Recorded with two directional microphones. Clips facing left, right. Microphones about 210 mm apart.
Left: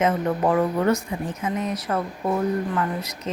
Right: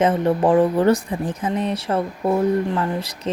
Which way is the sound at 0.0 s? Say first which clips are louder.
Right 4 dB; 30° right (ahead or behind).